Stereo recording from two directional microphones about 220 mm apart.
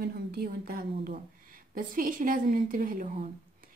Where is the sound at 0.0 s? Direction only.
45° right (ahead or behind).